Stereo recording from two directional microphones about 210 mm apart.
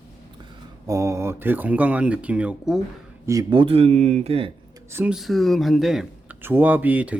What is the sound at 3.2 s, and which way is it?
Speech, 20° right (ahead or behind).